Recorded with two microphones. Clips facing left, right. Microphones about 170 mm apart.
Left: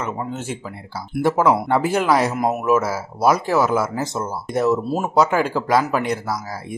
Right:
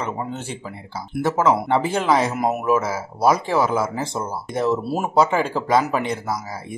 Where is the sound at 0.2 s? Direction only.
5° left (ahead or behind).